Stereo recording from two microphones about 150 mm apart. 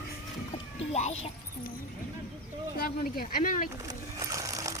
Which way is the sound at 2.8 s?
85° left.